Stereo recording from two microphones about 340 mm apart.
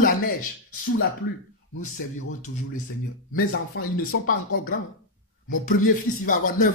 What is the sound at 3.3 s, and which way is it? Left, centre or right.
A man's voice, left.